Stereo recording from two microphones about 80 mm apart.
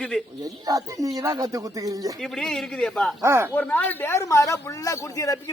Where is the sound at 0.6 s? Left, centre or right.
Right.